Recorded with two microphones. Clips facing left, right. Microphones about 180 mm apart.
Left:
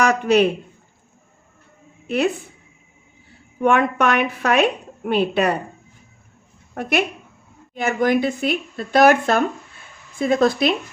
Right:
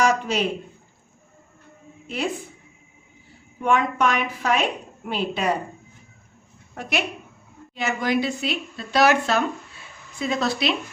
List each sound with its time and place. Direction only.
0.0 s speech: 65° left (ahead or behind)
2.0 s a woman's voice: 65° left (ahead or behind)
3.6 s a woman's voice: 65° left (ahead or behind)
6.8 s a woman's voice: 55° left (ahead or behind)